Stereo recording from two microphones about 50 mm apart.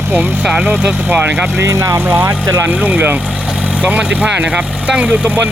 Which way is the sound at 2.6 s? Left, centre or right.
Right.